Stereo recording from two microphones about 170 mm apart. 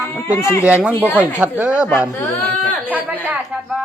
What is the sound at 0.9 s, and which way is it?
Speech, 10° left (ahead or behind).